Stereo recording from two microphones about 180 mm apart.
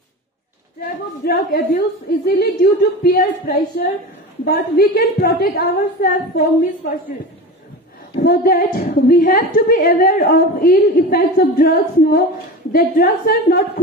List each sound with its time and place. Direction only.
1.2 s a woman's voice: 60° left (ahead or behind)
8.2 s a woman's voice: 60° left (ahead or behind)